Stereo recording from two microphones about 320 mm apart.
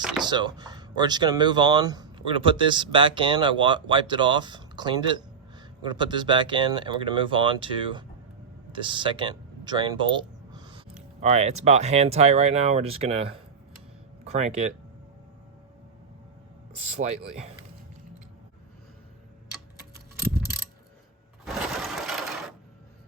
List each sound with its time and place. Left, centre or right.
0.2 s speech: centre
16.9 s speech: right
21.4 s a sound: centre